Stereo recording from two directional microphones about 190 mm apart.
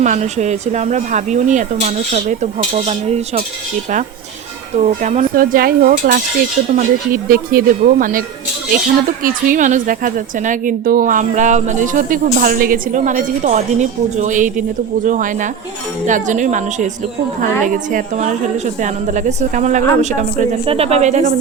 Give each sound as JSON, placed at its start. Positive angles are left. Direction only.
{"t": 0.0, "sound": "speech", "side_deg": -40}
{"t": 4.8, "sound": "a woman's voice", "side_deg": -40}
{"t": 9.2, "sound": "a woman's voice", "side_deg": -45}